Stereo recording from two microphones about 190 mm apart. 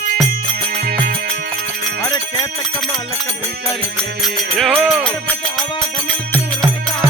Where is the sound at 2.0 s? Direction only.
20° left (ahead or behind).